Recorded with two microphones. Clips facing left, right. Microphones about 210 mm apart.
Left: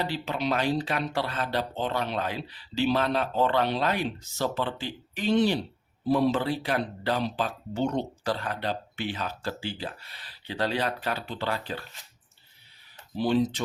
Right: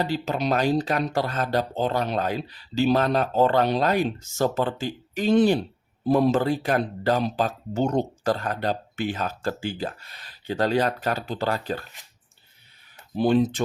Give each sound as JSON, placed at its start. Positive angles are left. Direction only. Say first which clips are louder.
{"t": 0.0, "sound": "speech", "louder": "right 4 dB", "side_deg": -45}
{"t": 13.1, "sound": "speech", "louder": "right 4 dB", "side_deg": -50}